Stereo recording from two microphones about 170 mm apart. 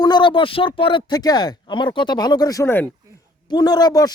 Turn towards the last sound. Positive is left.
turn(degrees=20)  # may be behind; listen again after turning